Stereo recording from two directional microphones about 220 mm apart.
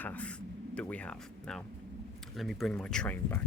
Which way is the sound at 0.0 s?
10° left (ahead or behind).